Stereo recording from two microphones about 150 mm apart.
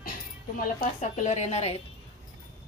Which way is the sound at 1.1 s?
50° left (ahead or behind).